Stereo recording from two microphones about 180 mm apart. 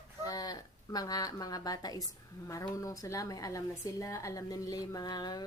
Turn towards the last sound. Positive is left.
turn(degrees=20)  # may be behind; listen again after turning